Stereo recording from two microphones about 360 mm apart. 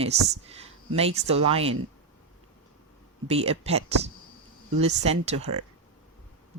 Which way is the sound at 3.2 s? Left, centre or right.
Centre.